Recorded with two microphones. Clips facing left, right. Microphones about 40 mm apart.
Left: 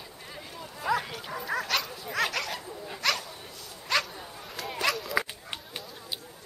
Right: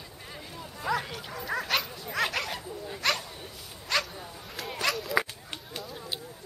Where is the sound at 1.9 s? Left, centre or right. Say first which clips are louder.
Even; centre.